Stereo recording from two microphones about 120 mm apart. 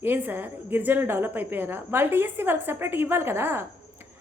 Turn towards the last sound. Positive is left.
turn(degrees=-15)  # may be behind; listen again after turning